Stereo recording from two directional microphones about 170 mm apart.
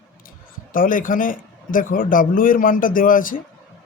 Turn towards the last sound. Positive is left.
turn(degrees=55)  # may be behind; listen again after turning